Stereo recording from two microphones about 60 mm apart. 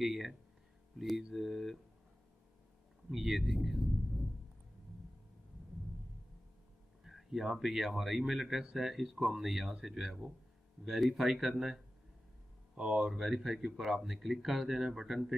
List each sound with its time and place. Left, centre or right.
0.0 s speech: centre
3.1 s speech: centre
7.1 s speech: centre